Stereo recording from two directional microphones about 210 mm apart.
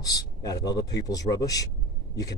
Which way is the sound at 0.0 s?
20° left (ahead or behind).